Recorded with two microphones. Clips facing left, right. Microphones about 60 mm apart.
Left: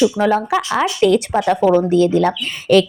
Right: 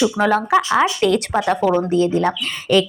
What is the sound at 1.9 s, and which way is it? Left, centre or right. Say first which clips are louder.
Speech: left 3 dB; left.